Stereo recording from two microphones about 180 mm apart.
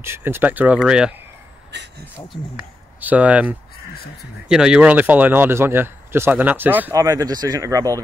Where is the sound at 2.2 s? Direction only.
5° right (ahead or behind).